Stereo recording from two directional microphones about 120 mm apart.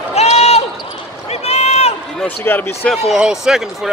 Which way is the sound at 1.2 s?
60° left (ahead or behind).